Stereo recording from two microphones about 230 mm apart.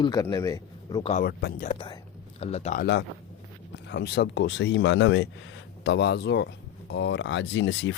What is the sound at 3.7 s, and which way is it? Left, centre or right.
Speech, left.